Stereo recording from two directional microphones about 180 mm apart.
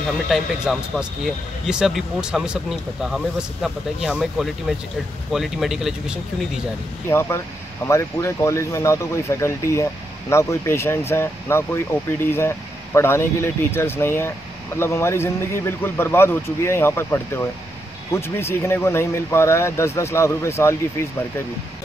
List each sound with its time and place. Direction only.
0.3 s speech: centre (ahead or behind)
7.1 s speech: 15° left (ahead or behind)